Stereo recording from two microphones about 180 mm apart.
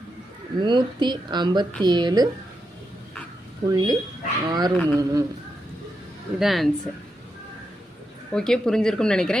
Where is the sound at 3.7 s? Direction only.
20° right (ahead or behind).